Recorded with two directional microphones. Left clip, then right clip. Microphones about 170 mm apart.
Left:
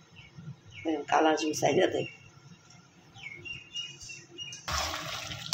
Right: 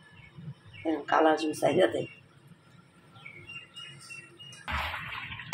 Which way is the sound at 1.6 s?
5° right (ahead or behind).